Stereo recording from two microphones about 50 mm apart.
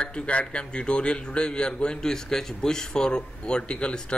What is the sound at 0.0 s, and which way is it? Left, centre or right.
A man's voice, left.